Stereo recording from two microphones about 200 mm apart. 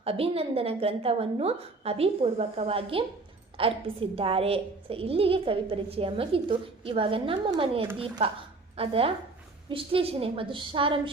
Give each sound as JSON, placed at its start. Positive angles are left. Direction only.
{"t": 0.0, "sound": "a woman's voice", "side_deg": -30}